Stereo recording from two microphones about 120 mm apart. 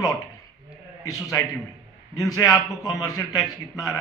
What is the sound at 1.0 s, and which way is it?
A man's voice, 30° left (ahead or behind).